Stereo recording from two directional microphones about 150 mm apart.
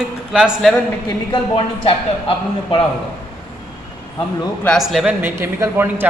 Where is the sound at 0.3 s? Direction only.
Centre (ahead or behind).